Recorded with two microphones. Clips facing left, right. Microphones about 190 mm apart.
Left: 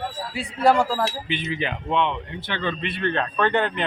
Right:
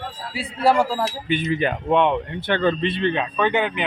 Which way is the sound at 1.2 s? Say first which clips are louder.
Right 6 dB; 45° right (ahead or behind).